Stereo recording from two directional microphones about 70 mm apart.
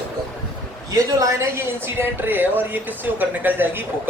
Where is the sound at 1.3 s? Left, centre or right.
Right.